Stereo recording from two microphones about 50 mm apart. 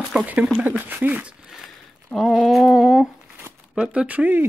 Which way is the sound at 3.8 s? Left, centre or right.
Right.